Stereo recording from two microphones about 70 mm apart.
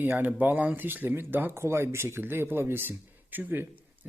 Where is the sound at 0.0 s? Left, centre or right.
Right.